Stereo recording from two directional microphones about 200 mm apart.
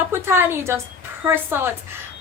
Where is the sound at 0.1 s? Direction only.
10° right (ahead or behind).